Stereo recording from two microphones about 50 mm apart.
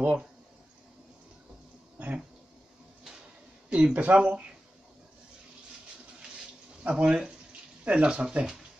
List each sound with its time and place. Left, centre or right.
0.0 s speech: right
2.0 s a sound: right
3.7 s speech: right
6.8 s speech: right